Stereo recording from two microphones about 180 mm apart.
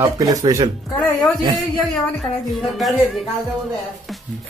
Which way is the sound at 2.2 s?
Centre (ahead or behind).